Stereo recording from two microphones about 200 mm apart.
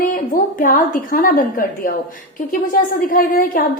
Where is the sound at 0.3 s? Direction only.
45° left (ahead or behind).